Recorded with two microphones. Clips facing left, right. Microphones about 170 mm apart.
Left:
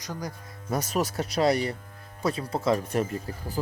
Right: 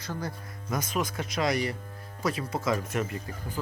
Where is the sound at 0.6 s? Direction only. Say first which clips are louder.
Left 3 dB; 35° left (ahead or behind).